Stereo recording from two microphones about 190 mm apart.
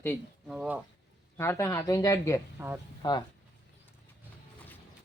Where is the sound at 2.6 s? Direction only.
10° right (ahead or behind).